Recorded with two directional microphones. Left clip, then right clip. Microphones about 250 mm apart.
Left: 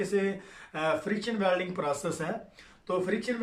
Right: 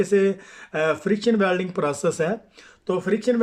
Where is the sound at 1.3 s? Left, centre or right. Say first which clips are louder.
Right 6 dB; right.